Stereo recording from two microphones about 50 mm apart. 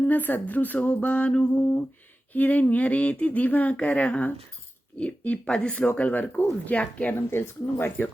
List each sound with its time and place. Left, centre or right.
0.0 s speech: left
2.3 s speech: left
7.1 s speech: left